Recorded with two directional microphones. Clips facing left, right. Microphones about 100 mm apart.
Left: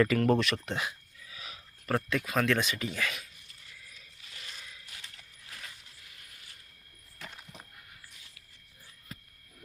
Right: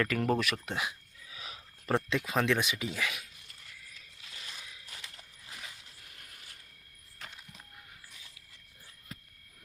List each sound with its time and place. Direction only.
0.2 s speech: 5° right (ahead or behind)
1.3 s speech: 30° right (ahead or behind); by 3.2 s 10° right (ahead or behind)